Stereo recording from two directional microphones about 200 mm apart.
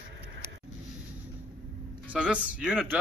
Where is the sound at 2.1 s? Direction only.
5° right (ahead or behind).